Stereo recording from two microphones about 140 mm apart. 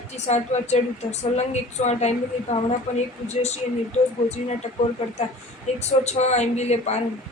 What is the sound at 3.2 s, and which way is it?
Speech, 50° left (ahead or behind).